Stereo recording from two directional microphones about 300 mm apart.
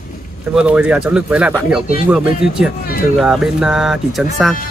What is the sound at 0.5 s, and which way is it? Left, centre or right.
Speech, centre.